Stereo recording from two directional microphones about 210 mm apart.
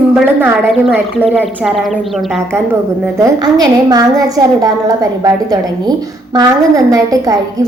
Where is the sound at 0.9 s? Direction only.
10° right (ahead or behind).